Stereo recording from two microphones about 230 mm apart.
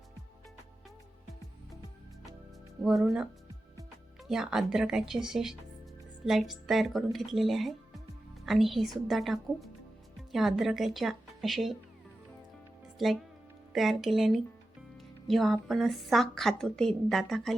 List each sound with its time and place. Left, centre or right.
2.8 s a woman's voice: centre
13.0 s a woman's voice: centre